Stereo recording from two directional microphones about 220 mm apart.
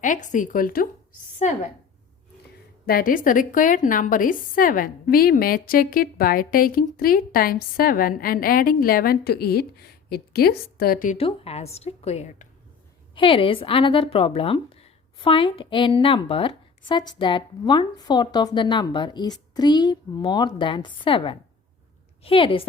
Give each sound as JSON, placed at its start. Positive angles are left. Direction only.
{"t": 0.0, "sound": "a woman's voice", "side_deg": 35}
{"t": 2.8, "sound": "a woman's voice", "side_deg": 40}